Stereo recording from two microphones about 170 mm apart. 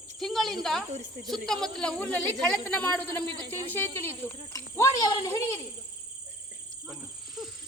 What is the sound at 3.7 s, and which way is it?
Cricket, 15° left (ahead or behind).